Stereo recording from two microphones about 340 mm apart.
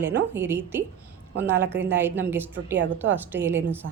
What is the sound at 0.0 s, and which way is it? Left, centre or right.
A woman's voice, centre.